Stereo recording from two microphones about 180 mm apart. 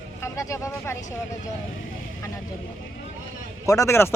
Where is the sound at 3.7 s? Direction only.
15° left (ahead or behind).